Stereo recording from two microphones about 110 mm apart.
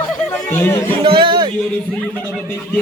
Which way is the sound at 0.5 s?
20° left (ahead or behind).